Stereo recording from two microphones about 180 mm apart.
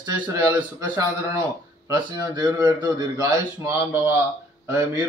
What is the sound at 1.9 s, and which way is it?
A man's voice, 20° right (ahead or behind).